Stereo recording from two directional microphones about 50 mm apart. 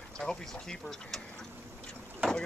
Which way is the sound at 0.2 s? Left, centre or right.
Centre.